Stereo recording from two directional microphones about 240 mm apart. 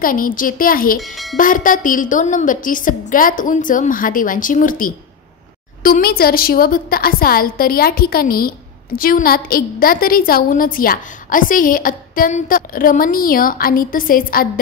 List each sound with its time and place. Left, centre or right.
0.0 s a woman's voice: left
0.9 s speech: centre
1.3 s a woman's voice: left